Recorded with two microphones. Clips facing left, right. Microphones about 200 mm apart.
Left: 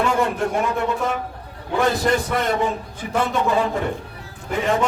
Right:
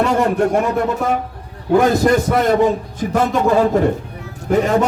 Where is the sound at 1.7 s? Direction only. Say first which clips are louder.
Right 7 dB; 45° right (ahead or behind).